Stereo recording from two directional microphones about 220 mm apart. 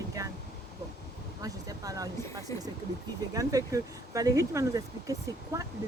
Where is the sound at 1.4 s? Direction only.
15° right (ahead or behind).